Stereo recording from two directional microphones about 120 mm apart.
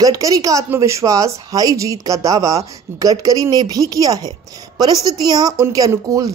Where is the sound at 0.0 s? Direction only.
30° right (ahead or behind).